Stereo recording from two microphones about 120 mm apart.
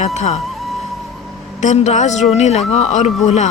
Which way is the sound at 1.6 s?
75° left (ahead or behind).